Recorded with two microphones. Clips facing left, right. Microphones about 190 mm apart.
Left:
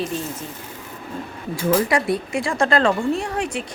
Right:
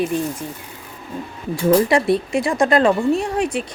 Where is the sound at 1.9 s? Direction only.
25° right (ahead or behind).